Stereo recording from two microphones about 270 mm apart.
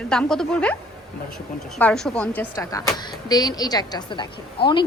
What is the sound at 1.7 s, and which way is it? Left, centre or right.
Speech, centre.